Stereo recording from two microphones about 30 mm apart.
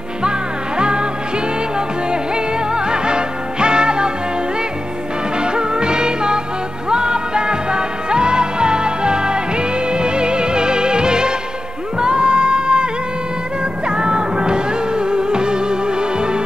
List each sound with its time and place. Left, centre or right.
0.7 s music: right
2.3 s music: right
5.4 s music: right
13.8 s music: right